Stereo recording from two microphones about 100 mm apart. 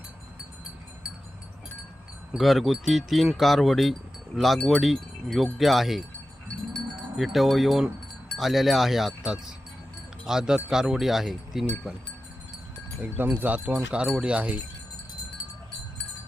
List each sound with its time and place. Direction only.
2.3 s speech: centre (ahead or behind)
6.9 s wind chime: centre (ahead or behind)
8.4 s speech: centre (ahead or behind)
13.0 s speech: 20° right (ahead or behind)